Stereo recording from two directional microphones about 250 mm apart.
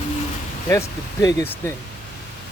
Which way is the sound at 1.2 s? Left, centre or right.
Centre.